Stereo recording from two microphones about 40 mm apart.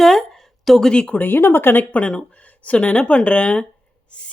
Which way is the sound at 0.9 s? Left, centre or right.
Left.